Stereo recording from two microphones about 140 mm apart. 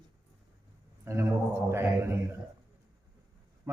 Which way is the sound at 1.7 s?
20° right (ahead or behind).